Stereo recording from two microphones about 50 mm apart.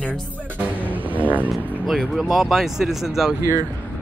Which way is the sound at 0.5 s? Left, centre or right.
Right.